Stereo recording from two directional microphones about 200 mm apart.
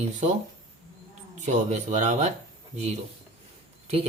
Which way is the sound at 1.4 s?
35° right (ahead or behind).